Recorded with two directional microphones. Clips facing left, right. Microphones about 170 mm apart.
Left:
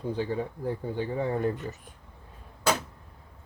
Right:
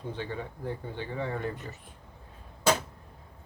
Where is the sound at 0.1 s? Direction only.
40° left (ahead or behind).